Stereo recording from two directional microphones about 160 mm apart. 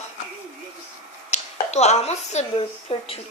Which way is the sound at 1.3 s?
45° left (ahead or behind).